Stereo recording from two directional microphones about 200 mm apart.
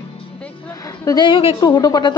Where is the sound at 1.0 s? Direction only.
20° left (ahead or behind).